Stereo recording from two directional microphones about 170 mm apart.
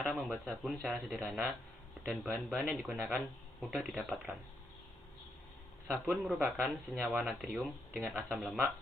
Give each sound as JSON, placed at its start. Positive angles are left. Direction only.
{"t": 0.0, "sound": "speech", "side_deg": 0}
{"t": 5.9, "sound": "speech", "side_deg": 0}